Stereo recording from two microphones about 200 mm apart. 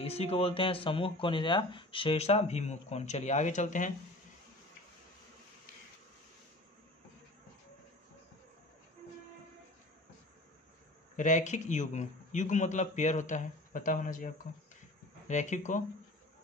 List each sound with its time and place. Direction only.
0.0 s speech: 30° left (ahead or behind)
11.1 s speech: 40° left (ahead or behind)